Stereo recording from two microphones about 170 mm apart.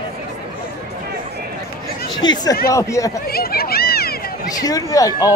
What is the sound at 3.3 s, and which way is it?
Speech, 65° left (ahead or behind).